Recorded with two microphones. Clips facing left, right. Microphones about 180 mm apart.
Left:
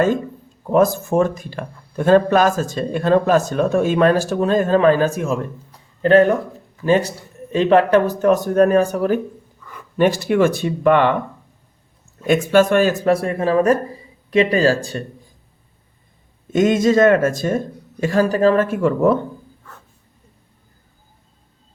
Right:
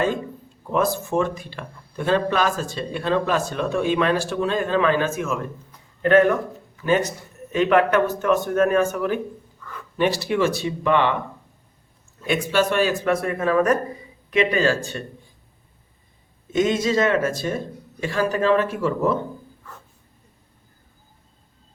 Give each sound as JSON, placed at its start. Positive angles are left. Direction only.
{"t": 0.7, "sound": "speech", "side_deg": 45}
{"t": 12.2, "sound": "speech", "side_deg": 45}
{"t": 16.5, "sound": "speech", "side_deg": 50}